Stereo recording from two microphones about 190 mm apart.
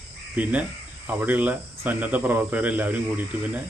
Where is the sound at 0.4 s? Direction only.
10° right (ahead or behind).